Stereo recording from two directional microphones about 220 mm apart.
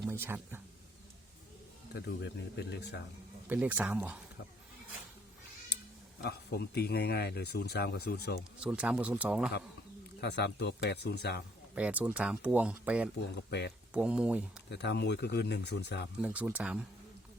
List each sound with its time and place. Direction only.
0.0 s speech: 10° right (ahead or behind)
1.9 s speech: 50° left (ahead or behind)
3.4 s speech: 10° right (ahead or behind)
6.2 s speech: 50° left (ahead or behind)
8.6 s speech: 5° right (ahead or behind)
10.2 s speech: 50° left (ahead or behind)
11.7 s speech: 5° right (ahead or behind)
13.3 s speech: 50° left (ahead or behind)
13.9 s speech: 5° right (ahead or behind)
14.7 s speech: 50° left (ahead or behind)
16.2 s speech: 5° right (ahead or behind)